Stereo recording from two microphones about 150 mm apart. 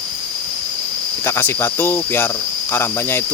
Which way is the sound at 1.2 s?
15° left (ahead or behind).